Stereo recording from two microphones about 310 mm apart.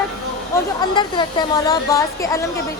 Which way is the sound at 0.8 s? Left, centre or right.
Centre.